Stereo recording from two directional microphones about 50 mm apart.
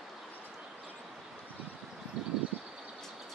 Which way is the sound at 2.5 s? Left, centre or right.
Right.